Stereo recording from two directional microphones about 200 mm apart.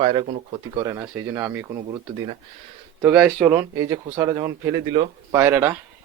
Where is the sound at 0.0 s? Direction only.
25° right (ahead or behind).